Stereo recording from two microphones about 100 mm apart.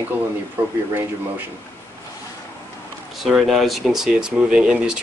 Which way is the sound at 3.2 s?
5° right (ahead or behind).